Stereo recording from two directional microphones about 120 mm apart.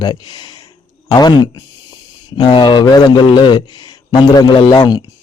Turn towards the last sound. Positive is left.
turn(degrees=30)  # may be behind; listen again after turning